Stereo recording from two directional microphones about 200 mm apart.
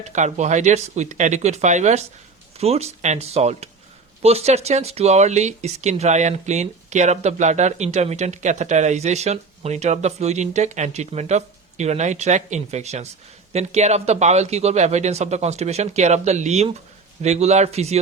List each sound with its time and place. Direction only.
0.0 s speech: 35° right (ahead or behind)